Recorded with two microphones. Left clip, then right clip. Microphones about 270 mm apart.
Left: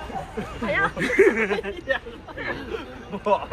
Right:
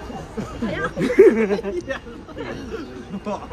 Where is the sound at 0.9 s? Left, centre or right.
Centre.